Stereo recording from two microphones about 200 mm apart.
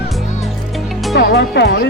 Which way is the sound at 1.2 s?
55° left (ahead or behind).